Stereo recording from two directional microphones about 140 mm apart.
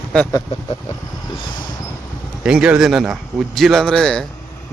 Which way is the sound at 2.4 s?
5° right (ahead or behind).